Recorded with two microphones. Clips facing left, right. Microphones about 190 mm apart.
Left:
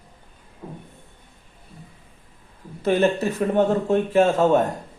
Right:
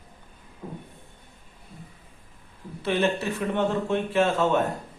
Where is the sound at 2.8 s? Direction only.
45° left (ahead or behind).